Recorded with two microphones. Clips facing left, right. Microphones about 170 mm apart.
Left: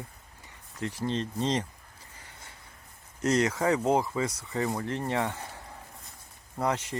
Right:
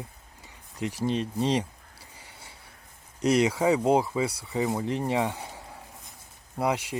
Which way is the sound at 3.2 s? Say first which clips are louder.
Right 3 dB; 10° right (ahead or behind).